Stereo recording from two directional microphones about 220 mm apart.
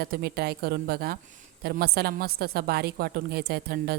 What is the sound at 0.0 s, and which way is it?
A woman's voice, 45° right (ahead or behind).